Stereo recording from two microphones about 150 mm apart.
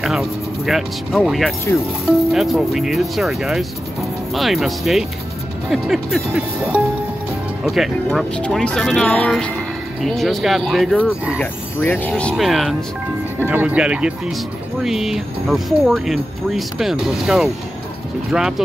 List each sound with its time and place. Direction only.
0.0 s speech: centre (ahead or behind)
11.3 s speech: 15° left (ahead or behind)
12.2 s speech: 5° left (ahead or behind)